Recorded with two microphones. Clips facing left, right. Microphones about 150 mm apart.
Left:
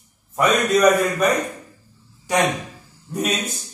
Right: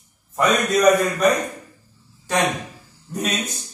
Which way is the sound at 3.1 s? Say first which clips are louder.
Left 2 dB; 5° left (ahead or behind).